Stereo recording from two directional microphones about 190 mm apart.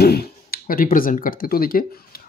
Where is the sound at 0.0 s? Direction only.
55° left (ahead or behind).